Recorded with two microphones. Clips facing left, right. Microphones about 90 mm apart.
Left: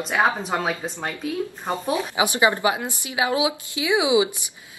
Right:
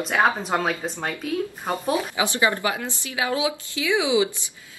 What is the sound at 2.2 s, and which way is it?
Speech, 20° left (ahead or behind).